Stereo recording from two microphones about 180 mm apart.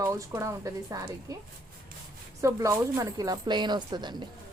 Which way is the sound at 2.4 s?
15° right (ahead or behind).